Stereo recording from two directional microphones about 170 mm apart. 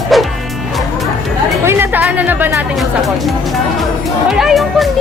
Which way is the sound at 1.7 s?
10° right (ahead or behind).